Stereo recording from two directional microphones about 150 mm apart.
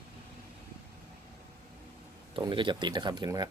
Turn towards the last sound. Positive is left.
turn(degrees=-25)  # may be behind; listen again after turning